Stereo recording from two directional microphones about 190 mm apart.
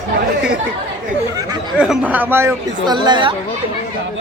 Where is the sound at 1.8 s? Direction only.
5° right (ahead or behind); by 3.3 s 25° right (ahead or behind).